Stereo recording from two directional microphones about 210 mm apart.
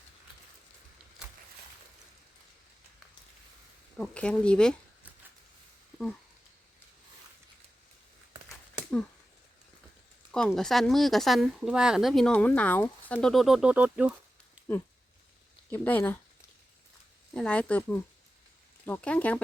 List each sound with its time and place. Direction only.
3.9 s speech: 5° left (ahead or behind)
10.3 s speech: 5° left (ahead or behind)
15.7 s speech: 10° left (ahead or behind)
17.3 s speech: 5° left (ahead or behind)